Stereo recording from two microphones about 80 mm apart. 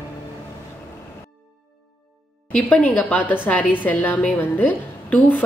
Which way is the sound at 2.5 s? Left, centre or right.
Centre.